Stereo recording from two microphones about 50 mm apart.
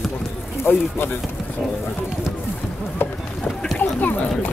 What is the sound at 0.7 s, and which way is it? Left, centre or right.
Speech, left.